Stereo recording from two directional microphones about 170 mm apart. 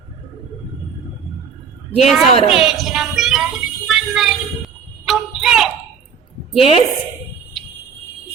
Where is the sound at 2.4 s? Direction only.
35° left (ahead or behind).